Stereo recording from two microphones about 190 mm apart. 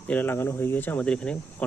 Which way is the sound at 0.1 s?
10° left (ahead or behind).